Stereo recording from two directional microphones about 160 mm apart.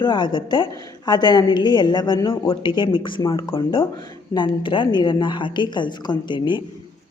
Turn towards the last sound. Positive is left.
turn(degrees=30)  # may be behind; listen again after turning